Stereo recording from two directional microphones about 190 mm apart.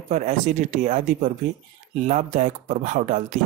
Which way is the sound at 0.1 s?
40° right (ahead or behind).